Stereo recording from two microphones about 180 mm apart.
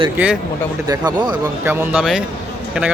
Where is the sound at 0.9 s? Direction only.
20° right (ahead or behind).